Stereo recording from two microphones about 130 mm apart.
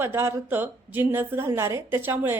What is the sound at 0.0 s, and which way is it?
A woman's voice, 20° right (ahead or behind).